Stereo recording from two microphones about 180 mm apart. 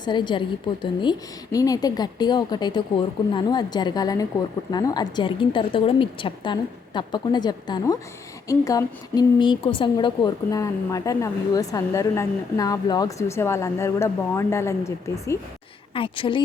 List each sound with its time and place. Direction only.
0.0 s a woman's voice: 25° left (ahead or behind)
16.0 s a woman's voice: 30° left (ahead or behind)